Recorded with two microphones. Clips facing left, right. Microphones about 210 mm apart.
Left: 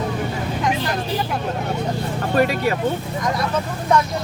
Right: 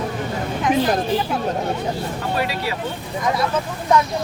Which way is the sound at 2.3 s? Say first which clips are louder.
Left 7 dB; 50° left (ahead or behind).